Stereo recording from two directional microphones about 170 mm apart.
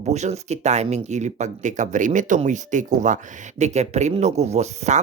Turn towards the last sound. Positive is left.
turn(degrees=-40)  # may be behind; listen again after turning